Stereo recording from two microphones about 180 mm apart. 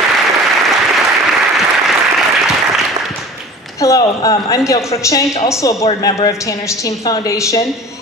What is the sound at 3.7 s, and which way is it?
A woman's voice, 20° left (ahead or behind).